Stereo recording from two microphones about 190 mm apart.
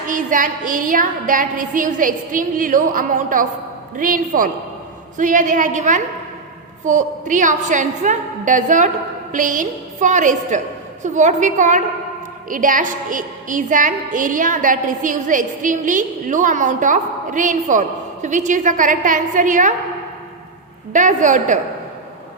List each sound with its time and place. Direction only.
0.1 s a woman's voice: 45° right (ahead or behind)
20.9 s a woman's voice: 40° right (ahead or behind)